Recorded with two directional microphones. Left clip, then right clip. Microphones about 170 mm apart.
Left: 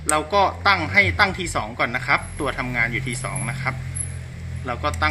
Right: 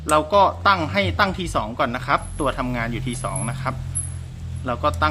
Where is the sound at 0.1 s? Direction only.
45° right (ahead or behind).